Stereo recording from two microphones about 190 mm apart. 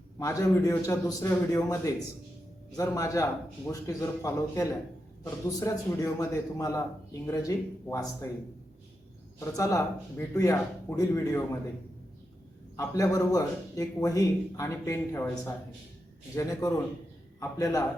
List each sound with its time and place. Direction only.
0.2 s a man's voice: 15° left (ahead or behind)
9.4 s a man's voice: 15° left (ahead or behind)
12.7 s a man's voice: 15° left (ahead or behind)